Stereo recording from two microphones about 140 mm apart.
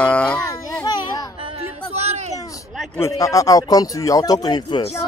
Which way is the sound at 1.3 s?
45° right (ahead or behind).